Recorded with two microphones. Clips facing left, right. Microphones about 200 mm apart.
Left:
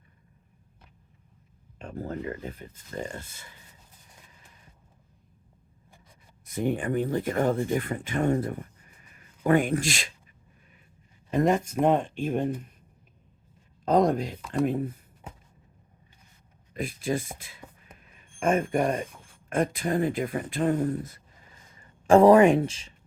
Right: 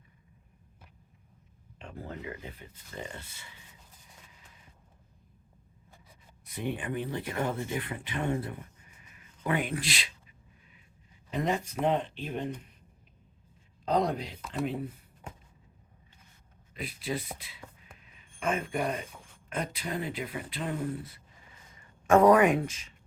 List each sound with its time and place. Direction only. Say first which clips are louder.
1.8 s speech: left 7 dB; 45° left (ahead or behind)
6.4 s speech: left 7 dB; 45° left (ahead or behind)
11.3 s speech: left 7 dB; 45° left (ahead or behind)
13.8 s speech: left 6 dB; 45° left (ahead or behind)
16.7 s speech: left 6 dB; 45° left (ahead or behind)
18.0 s a sound: left 6 dB; 45° left (ahead or behind)
19.5 s speech: left 9 dB; 50° left (ahead or behind)
21.8 s speech: left 4 dB; 30° left (ahead or behind)